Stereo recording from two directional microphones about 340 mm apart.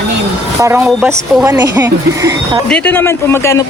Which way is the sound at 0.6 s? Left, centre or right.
Centre.